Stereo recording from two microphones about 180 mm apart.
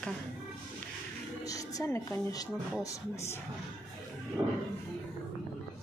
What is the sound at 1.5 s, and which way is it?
Speech, 20° left (ahead or behind).